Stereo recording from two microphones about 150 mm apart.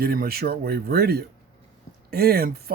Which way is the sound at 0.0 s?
85° right.